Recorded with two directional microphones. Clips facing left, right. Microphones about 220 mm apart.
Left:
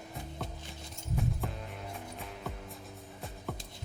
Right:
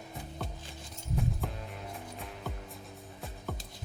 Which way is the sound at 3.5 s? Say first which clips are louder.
Even; centre (ahead or behind).